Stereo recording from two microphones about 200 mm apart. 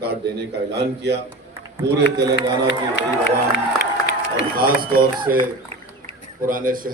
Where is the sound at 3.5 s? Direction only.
50° left (ahead or behind).